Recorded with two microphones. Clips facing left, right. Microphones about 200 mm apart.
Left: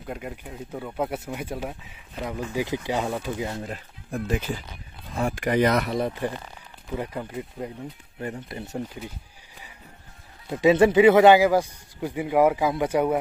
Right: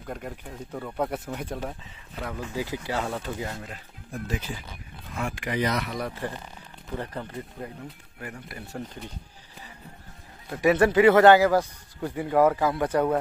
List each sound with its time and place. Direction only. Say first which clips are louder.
0.0 s speech: left 2 dB; 5° left (ahead or behind)
2.1 s a man's voice: left 3 dB; 15° left (ahead or behind)
3.5 s speech: left 6 dB; 35° left (ahead or behind)
4.1 s speech: left 5 dB; 55° left (ahead or behind)
5.1 s speech: left 6 dB; 40° left (ahead or behind)
5.9 s a man's voice: left 5 dB; 25° left (ahead or behind)
8.2 s speech: left 6 dB; 25° left (ahead or behind)
10.5 s a man's voice: left 3 dB; 20° left (ahead or behind)